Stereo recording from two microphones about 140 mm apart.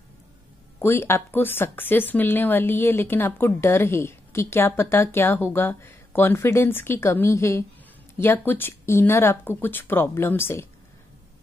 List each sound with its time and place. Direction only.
0.7 s speech: 15° left (ahead or behind)